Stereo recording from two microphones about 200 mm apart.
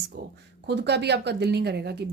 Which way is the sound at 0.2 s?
50° right (ahead or behind).